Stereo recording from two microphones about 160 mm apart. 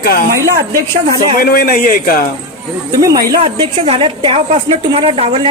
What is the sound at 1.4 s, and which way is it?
Speech, 65° left (ahead or behind).